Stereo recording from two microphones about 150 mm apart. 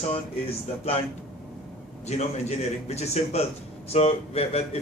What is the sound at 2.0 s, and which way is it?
A man's voice, 45° left (ahead or behind).